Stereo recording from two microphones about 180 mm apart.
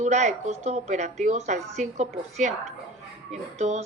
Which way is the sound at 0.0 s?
40° right (ahead or behind).